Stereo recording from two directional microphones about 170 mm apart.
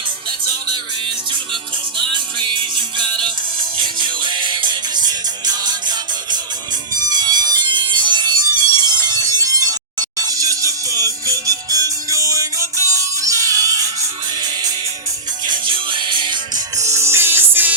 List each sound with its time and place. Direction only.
2.0 s music: 30° right (ahead or behind)
7.1 s music: 25° right (ahead or behind)